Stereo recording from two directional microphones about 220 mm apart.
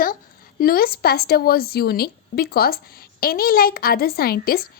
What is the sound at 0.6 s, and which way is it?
A woman's voice, 40° left (ahead or behind).